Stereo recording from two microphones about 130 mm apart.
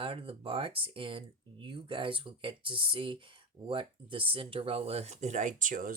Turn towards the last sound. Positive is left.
turn(degrees=-90)